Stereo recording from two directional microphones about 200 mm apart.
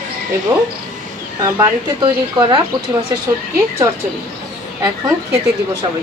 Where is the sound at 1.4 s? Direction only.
20° right (ahead or behind).